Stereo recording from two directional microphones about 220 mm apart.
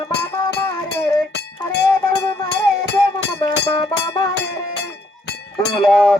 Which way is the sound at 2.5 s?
50° left (ahead or behind).